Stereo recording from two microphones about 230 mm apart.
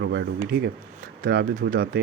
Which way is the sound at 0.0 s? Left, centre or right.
Right.